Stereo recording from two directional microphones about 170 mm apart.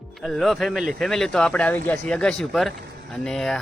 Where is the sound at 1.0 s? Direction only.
Centre (ahead or behind).